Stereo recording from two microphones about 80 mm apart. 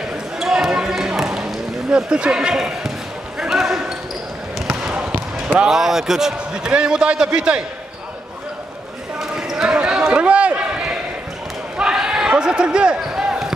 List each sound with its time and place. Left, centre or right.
0.4 s basketball bounce: centre
1.9 s speech: centre
3.3 s basketball bounce: centre
4.9 s basketball bounce: right
5.6 s speech: centre
9.2 s a sound: centre
11.8 s basketball bounce: centre